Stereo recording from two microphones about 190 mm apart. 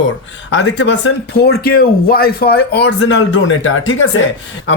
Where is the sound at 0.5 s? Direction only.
75° left (ahead or behind).